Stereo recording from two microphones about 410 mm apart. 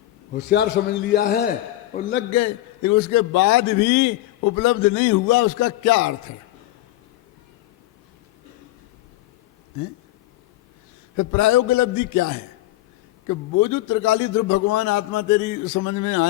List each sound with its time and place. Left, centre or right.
0.3 s a man's voice: left
2.3 s a man's voice: left
11.2 s a man's voice: left